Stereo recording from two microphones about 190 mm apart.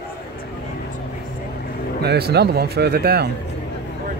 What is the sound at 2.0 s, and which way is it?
Speech, 55° right (ahead or behind).